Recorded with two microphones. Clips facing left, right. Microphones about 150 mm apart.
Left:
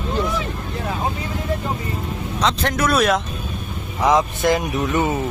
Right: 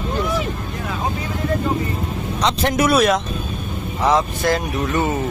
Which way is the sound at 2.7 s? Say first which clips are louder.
Right 3 dB; 10° right (ahead or behind).